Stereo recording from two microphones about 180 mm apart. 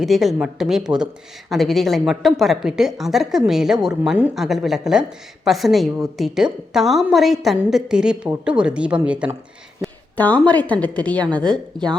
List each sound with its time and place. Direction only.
0.0 s a woman's voice: centre (ahead or behind)
10.2 s a woman's voice: 10° left (ahead or behind)